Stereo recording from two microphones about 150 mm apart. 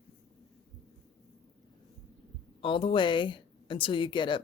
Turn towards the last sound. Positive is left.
turn(degrees=30)  # may be behind; listen again after turning